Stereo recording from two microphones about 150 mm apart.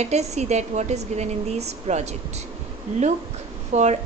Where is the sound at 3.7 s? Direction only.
50° right (ahead or behind).